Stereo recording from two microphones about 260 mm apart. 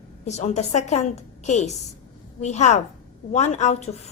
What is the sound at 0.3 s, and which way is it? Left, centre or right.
A woman's voice, left.